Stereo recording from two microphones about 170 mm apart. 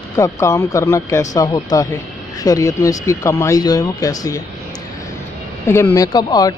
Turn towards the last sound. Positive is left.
turn(degrees=20)  # may be behind; listen again after turning